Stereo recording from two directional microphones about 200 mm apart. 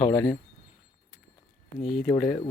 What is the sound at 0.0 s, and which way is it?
Speech, 10° left (ahead or behind).